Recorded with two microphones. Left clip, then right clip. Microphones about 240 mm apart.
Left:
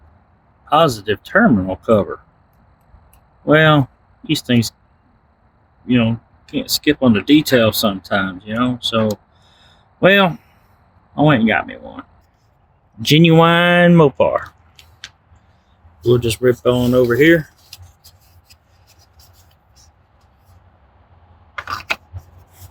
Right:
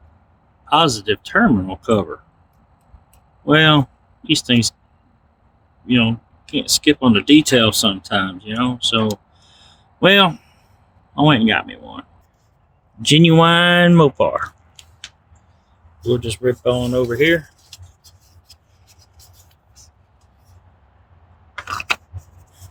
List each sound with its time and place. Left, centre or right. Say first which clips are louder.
0.7 s speech: left 1 dB; centre
3.4 s speech: left 1 dB; centre
5.8 s a sound: even; centre
6.7 s speech: even; centre
14.2 s a sound: left 2 dB; centre
16.0 s speech: left 4 dB; left